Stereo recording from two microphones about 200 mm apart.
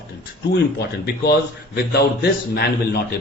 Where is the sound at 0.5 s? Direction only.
55° left (ahead or behind).